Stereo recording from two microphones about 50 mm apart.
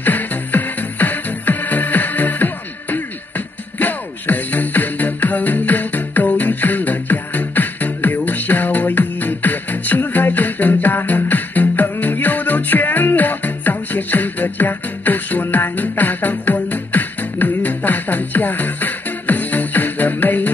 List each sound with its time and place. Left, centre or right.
0.0 s music: left